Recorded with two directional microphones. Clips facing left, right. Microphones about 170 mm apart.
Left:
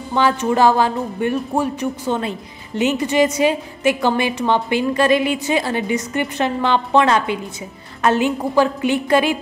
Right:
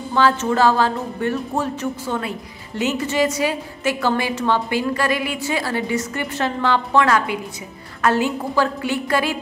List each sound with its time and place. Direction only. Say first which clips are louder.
0.1 s speech: left 1 dB; 15° left (ahead or behind)